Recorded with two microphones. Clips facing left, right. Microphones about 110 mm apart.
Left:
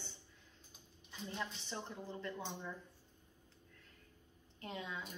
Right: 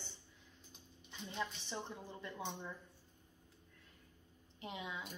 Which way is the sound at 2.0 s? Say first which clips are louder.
Left 3 dB; 15° right (ahead or behind).